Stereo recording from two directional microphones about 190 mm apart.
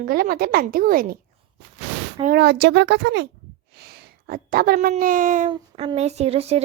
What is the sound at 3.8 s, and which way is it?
A child's voice, 50° right (ahead or behind).